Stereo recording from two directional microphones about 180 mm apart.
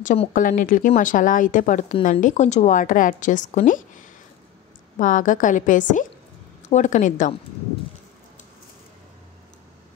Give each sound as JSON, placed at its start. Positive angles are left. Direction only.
{"t": 0.0, "sound": "speech", "side_deg": 45}
{"t": 4.9, "sound": "speech", "side_deg": 45}